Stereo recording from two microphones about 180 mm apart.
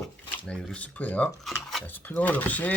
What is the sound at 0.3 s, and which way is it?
Speech, 5° left (ahead or behind).